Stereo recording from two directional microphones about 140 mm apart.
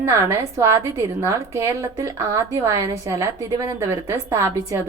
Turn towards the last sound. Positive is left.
turn(degrees=-20)  # may be behind; listen again after turning